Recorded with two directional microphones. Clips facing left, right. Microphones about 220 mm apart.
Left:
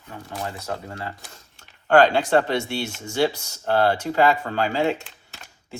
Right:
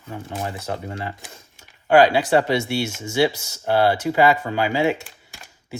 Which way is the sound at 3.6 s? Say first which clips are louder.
Right 2 dB; 10° right (ahead or behind).